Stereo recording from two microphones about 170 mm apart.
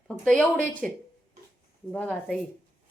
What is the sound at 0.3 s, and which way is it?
A woman's voice, 5° left (ahead or behind).